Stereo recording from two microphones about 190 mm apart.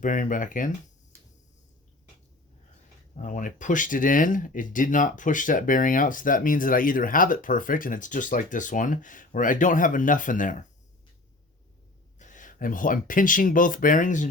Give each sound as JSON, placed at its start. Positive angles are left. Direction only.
{"t": 0.0, "sound": "speech", "side_deg": 45}
{"t": 3.2, "sound": "speech", "side_deg": 45}
{"t": 12.2, "sound": "speech", "side_deg": 40}